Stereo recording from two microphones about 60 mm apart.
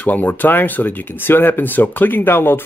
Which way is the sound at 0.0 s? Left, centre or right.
Left.